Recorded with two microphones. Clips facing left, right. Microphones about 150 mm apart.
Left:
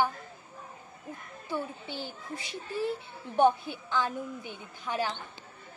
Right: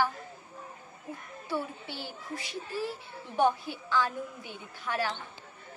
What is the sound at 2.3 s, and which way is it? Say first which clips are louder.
Speech: right 1 dB; 25° left (ahead or behind).